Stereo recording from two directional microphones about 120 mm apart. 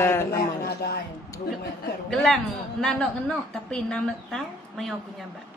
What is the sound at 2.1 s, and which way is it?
Speech, 5° left (ahead or behind).